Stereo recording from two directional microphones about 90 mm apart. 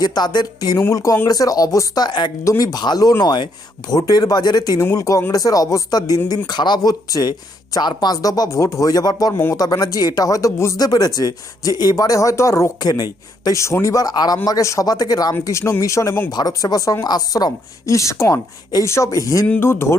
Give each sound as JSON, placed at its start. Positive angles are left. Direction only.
{"t": 0.0, "sound": "speech", "side_deg": 50}
{"t": 0.8, "sound": "speech", "side_deg": 35}
{"t": 2.0, "sound": "speech", "side_deg": 55}
{"t": 2.4, "sound": "speech", "side_deg": 35}
{"t": 4.8, "sound": "speech", "side_deg": 35}
{"t": 10.8, "sound": "a man's voice", "side_deg": 45}